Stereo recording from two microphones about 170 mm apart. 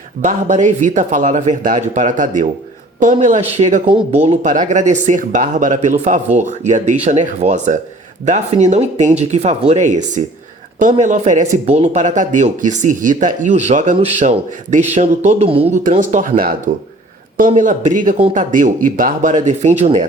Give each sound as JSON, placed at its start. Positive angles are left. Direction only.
{"t": 0.2, "sound": "speech", "side_deg": -45}
{"t": 3.8, "sound": "speech", "side_deg": -30}
{"t": 4.3, "sound": "speech", "side_deg": -45}
{"t": 15.8, "sound": "speech", "side_deg": -50}